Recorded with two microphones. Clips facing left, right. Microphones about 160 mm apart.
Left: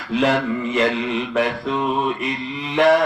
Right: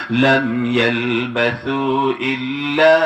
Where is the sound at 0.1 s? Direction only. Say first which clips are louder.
Right 4 dB; 90° right.